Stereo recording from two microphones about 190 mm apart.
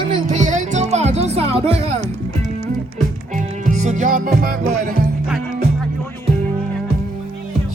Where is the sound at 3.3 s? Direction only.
40° right (ahead or behind).